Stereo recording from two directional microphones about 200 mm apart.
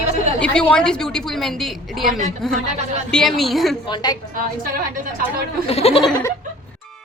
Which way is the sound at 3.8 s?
20° left (ahead or behind).